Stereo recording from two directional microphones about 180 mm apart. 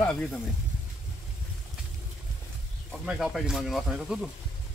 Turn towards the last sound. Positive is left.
turn(degrees=0)  # may be behind; listen again after turning